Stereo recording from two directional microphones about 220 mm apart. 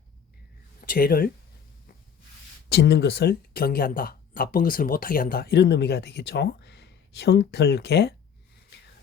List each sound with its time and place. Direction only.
0.9 s speech: 40° left (ahead or behind)
2.6 s speech: 45° left (ahead or behind)